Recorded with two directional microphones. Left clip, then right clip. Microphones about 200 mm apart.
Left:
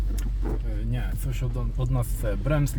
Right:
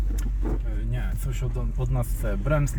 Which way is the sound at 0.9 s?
60° left (ahead or behind).